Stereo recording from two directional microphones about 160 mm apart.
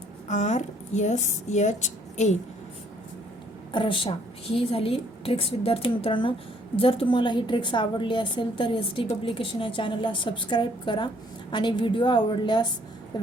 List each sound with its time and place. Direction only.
0.3 s speech: 45° left (ahead or behind)
3.7 s a woman's voice: 30° left (ahead or behind)